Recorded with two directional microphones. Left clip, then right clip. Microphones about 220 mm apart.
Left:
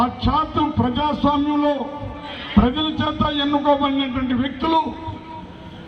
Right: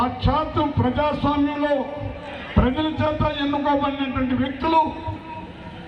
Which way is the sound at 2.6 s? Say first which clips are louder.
Right 1 dB; 50° left (ahead or behind).